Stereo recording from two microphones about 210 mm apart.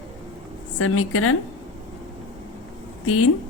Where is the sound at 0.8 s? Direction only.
90° left.